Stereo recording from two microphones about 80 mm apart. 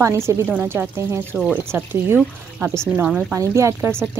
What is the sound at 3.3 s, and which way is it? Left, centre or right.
Speech, right.